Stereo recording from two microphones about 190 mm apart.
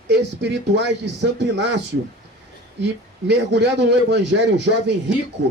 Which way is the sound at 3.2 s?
65° right (ahead or behind).